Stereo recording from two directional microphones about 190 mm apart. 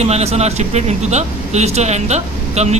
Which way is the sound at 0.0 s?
35° right (ahead or behind).